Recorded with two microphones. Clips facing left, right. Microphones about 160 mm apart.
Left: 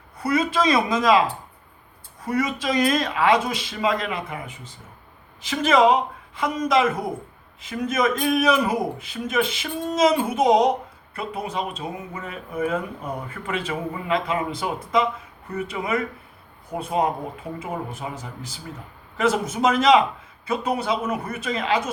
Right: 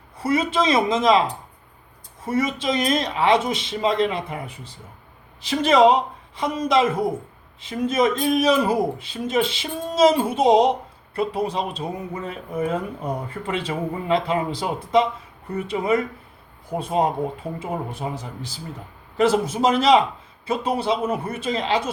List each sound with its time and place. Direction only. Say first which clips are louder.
0.2 s speech: right 1 dB; 25° right (ahead or behind)
2.3 s speech: right 1 dB; 25° right (ahead or behind)